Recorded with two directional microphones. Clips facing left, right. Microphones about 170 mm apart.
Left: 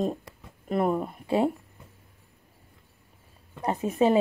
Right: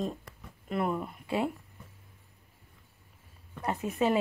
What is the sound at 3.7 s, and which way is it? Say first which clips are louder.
Speech: left 5 dB; 25° left (ahead or behind).